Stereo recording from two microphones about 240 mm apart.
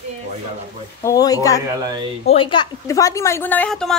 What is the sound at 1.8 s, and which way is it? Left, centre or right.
Speech, centre.